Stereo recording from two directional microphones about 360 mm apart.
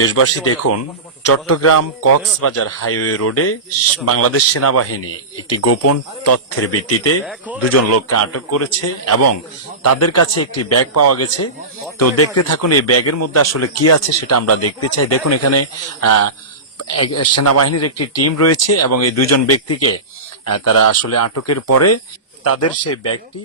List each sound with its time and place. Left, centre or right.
0.0 s speech: left
7.3 s speech: centre
7.7 s a man's voice: left